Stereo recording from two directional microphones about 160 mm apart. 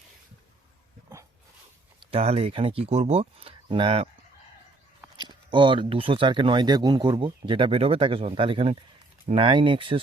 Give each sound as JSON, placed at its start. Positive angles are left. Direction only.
{"t": 2.0, "sound": "speech", "side_deg": -35}
{"t": 5.3, "sound": "speech", "side_deg": -30}